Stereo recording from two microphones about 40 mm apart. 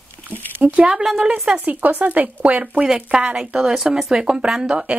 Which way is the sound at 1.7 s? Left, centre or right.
Right.